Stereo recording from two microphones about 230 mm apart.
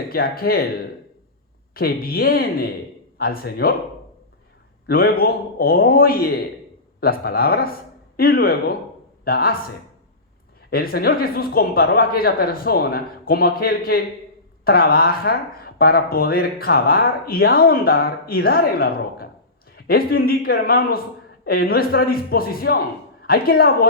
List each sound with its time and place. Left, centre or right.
0.1 s speech: left
1.7 s speech: left
4.9 s a man's voice: left
10.7 s speech: left